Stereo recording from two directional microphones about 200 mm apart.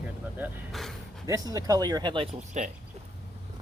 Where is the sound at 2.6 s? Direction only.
35° right (ahead or behind).